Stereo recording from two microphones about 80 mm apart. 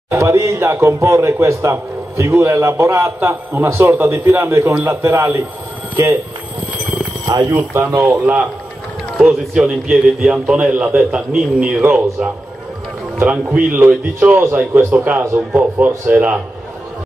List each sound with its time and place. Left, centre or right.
0.1 s a man's voice: right
7.5 s a man's voice: right
9.2 s a man's voice: centre
11.8 s a man's voice: right
13.2 s a man's voice: centre